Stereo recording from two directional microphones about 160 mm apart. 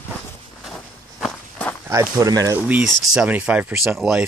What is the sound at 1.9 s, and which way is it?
Speech, 20° right (ahead or behind).